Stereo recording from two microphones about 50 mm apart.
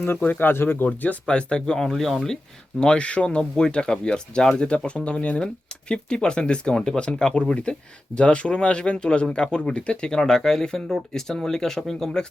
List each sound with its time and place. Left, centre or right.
0.2 s speech: left
0.9 s speech: left
1.3 s speech: centre
2.8 s speech: left